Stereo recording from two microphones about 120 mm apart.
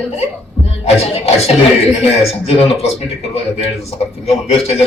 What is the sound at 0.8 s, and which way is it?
A man's voice, 60° left (ahead or behind).